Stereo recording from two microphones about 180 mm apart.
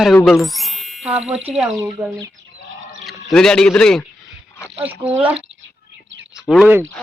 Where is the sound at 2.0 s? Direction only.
15° right (ahead or behind).